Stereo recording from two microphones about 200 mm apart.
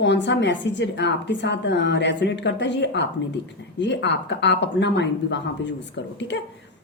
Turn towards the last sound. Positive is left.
turn(degrees=60)  # may be behind; listen again after turning